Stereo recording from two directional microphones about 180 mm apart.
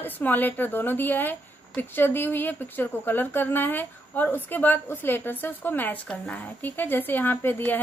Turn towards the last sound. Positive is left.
turn(degrees=10)  # may be behind; listen again after turning